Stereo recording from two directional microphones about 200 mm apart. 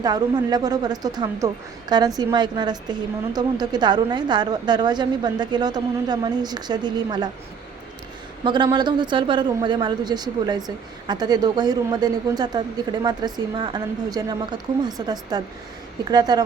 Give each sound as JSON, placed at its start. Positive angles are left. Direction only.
{"t": 0.0, "sound": "a woman's voice", "side_deg": -20}
{"t": 8.4, "sound": "a woman's voice", "side_deg": -25}